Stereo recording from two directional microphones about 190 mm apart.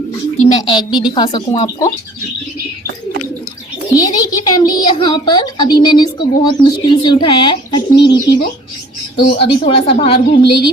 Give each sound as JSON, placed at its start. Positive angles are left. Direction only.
{"t": 0.6, "sound": "a woman's voice", "side_deg": 25}
{"t": 3.9, "sound": "a woman's voice", "side_deg": 20}
{"t": 9.4, "sound": "a woman's voice", "side_deg": 30}